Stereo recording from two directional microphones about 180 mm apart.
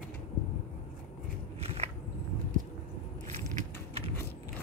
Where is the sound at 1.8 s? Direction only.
35° right (ahead or behind).